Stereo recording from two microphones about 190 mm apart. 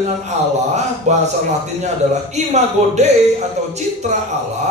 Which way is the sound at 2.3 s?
35° right (ahead or behind).